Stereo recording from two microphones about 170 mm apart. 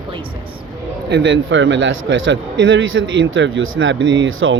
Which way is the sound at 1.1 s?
90° right.